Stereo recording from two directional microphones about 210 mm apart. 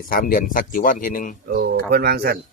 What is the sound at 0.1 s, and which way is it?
A man's voice, 40° left (ahead or behind).